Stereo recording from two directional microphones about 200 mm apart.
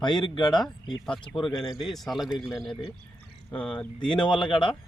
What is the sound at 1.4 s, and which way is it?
Speech, centre (ahead or behind).